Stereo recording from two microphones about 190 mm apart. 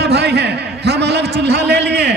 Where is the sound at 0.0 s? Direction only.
60° right (ahead or behind).